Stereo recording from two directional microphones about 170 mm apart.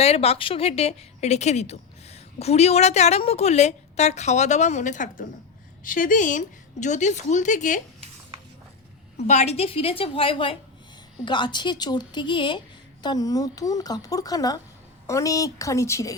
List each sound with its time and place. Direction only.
0.0 s a woman's voice: 35° left (ahead or behind)
9.1 s a woman's voice: 40° left (ahead or behind); by 16.1 s 15° left (ahead or behind)